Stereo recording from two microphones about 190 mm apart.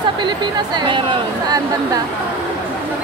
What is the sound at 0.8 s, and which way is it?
Speech, 25° right (ahead or behind).